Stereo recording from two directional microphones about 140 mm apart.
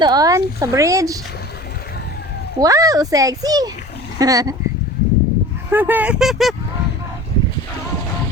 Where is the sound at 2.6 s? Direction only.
25° right (ahead or behind).